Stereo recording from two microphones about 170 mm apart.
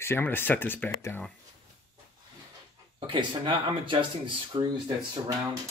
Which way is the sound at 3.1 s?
25° right (ahead or behind).